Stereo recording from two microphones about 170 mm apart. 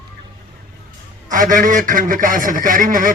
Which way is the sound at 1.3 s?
50° right (ahead or behind).